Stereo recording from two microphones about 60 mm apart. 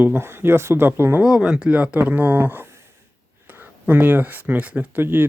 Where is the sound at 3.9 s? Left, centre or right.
Right.